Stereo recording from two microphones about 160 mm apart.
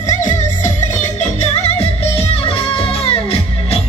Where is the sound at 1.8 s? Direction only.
40° left (ahead or behind).